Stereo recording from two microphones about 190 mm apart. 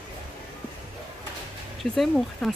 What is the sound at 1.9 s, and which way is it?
Speech, centre (ahead or behind).